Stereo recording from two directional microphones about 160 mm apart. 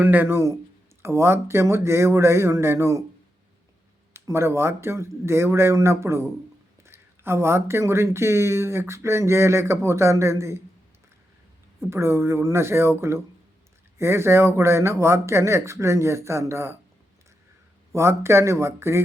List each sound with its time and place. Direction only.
0.0 s speech: 10° right (ahead or behind)
4.1 s speech: 15° right (ahead or behind)
11.9 s speech: 15° right (ahead or behind)
17.9 s speech: 15° right (ahead or behind)